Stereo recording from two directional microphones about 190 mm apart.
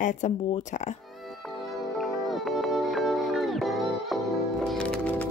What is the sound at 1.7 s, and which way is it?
Music, centre (ahead or behind).